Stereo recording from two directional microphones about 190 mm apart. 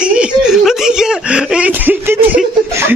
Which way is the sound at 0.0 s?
5° right (ahead or behind).